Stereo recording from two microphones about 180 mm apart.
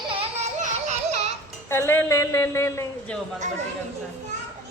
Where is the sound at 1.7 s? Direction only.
15° left (ahead or behind).